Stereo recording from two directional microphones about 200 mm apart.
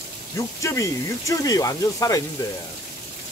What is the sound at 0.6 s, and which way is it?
Speech, 15° left (ahead or behind).